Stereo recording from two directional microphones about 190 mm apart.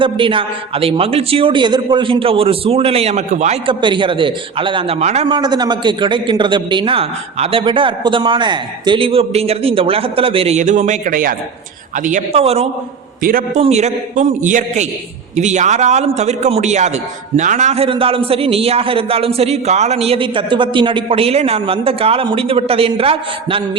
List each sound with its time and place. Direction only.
0.0 s a man's voice: 25° right (ahead or behind)
3.8 s a man's voice: 25° right (ahead or behind)
13.2 s a man's voice: 45° right (ahead or behind)
13.6 s a man's voice: 35° right (ahead or behind)